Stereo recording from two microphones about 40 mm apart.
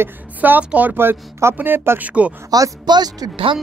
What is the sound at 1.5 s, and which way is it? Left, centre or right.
Speech, right.